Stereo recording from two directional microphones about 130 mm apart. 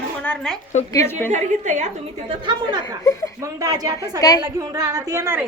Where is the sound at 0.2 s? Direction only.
10° left (ahead or behind).